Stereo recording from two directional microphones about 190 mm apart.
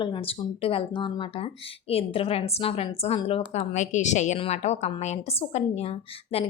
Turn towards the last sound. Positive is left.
turn(degrees=30)  # may be behind; listen again after turning